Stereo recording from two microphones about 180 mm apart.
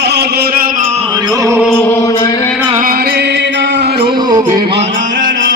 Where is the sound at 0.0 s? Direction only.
70° right (ahead or behind); by 0.8 s 55° right (ahead or behind).